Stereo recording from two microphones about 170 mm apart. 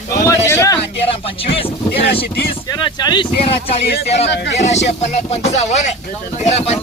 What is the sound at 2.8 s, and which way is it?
Speech, 25° left (ahead or behind).